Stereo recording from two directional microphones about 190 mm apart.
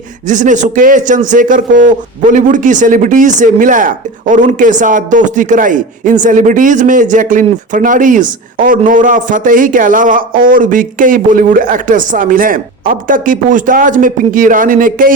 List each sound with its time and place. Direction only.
0.3 s speech: 40° right (ahead or behind)